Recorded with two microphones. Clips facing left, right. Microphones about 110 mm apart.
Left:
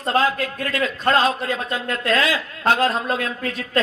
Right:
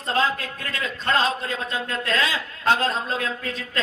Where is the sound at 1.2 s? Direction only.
25° right (ahead or behind).